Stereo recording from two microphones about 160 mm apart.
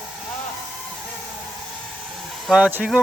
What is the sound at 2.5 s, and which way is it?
Speech, 10° right (ahead or behind).